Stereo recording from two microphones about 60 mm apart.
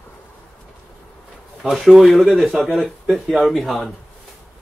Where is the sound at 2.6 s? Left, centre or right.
Centre.